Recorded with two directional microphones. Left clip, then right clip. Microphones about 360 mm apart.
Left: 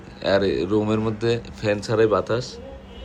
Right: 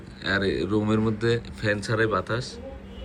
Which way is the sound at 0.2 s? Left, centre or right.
Centre.